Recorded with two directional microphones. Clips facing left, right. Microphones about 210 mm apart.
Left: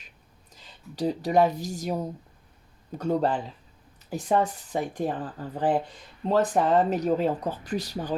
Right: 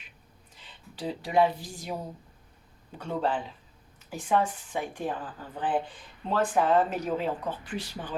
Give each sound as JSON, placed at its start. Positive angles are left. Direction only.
{"t": 0.5, "sound": "speech", "side_deg": 40}
{"t": 3.0, "sound": "speech", "side_deg": 40}